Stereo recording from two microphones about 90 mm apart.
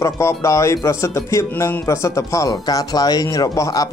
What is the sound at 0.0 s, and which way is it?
Speech, 30° left (ahead or behind).